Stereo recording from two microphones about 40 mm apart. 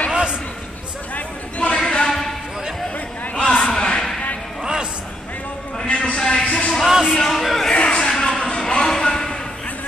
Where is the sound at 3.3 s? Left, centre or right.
Left.